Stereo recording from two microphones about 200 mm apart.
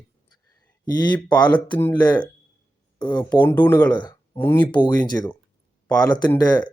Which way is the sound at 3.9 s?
20° left (ahead or behind).